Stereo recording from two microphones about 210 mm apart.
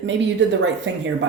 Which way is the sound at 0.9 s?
60° right (ahead or behind).